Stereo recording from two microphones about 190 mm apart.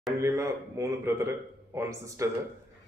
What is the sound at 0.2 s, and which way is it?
Speech, 15° right (ahead or behind).